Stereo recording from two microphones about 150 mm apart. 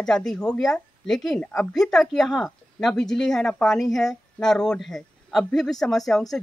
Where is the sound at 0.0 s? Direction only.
5° left (ahead or behind).